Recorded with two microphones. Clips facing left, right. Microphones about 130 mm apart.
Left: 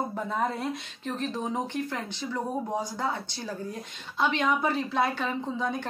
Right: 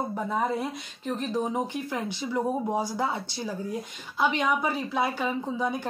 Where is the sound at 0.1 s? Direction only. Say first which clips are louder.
Right 2 dB; 5° right (ahead or behind).